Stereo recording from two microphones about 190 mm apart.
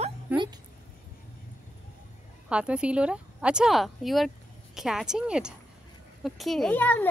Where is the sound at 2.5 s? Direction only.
5° right (ahead or behind).